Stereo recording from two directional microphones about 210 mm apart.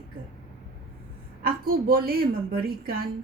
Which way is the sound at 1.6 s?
45° right (ahead or behind).